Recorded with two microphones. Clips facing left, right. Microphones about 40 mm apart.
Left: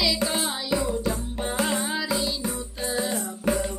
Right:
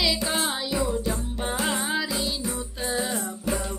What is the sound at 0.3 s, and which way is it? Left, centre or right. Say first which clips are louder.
Music: even; centre.